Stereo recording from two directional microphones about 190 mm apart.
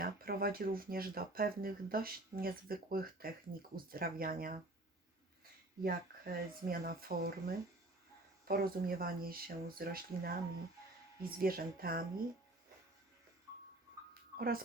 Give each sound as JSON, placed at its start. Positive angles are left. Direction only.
{"t": 0.0, "sound": "speech", "side_deg": -50}
{"t": 5.8, "sound": "speech", "side_deg": -50}
{"t": 14.1, "sound": "a sound", "side_deg": -50}